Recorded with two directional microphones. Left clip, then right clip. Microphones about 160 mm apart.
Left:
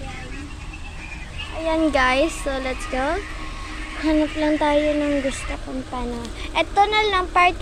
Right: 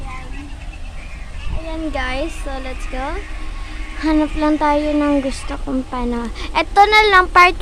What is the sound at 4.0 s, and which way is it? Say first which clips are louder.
Speech: right 3 dB; 20° right (ahead or behind).